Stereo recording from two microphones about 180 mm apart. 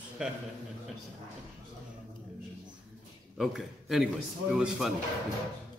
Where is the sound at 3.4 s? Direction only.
Centre (ahead or behind).